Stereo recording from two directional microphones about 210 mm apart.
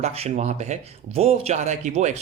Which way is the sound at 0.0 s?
30° right (ahead or behind).